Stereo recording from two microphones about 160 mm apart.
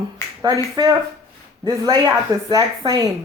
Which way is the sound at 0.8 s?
25° right (ahead or behind).